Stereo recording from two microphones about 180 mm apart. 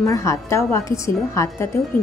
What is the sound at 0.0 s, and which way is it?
A woman's voice, 15° left (ahead or behind).